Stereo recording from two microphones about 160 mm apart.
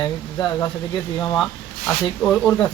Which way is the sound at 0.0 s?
20° left (ahead or behind).